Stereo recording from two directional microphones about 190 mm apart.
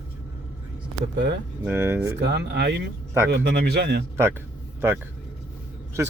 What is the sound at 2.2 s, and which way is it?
Speech, 60° right (ahead or behind).